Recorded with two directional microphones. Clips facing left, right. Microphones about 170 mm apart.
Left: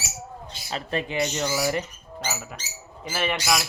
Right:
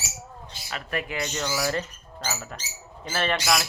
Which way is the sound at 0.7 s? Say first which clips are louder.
Left 3 dB; 25° left (ahead or behind).